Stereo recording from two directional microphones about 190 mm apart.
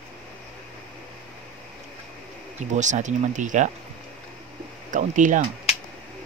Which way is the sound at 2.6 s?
40° right (ahead or behind).